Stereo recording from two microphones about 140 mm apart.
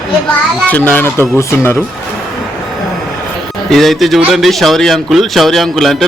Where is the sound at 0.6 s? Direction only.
10° left (ahead or behind).